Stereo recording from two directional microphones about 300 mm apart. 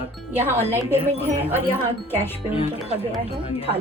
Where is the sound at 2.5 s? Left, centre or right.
Centre.